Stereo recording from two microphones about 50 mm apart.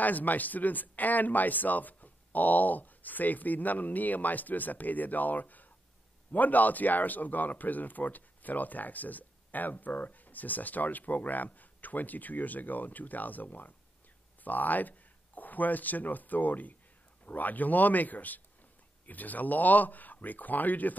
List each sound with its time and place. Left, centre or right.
0.0 s speech: left